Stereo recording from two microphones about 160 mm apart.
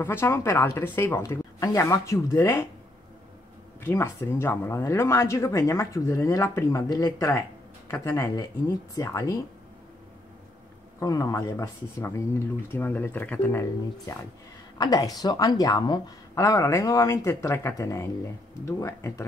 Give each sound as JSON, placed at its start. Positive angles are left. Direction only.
{"t": 0.0, "sound": "speech", "side_deg": 15}
{"t": 3.8, "sound": "a woman's voice", "side_deg": 15}
{"t": 11.0, "sound": "a woman's voice", "side_deg": 20}